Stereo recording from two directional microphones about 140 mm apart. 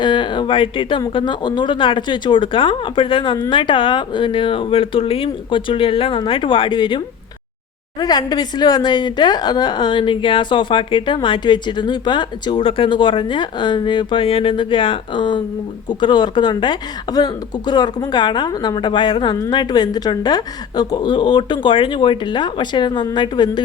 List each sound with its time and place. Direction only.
0.0 s a woman's voice: 35° left (ahead or behind)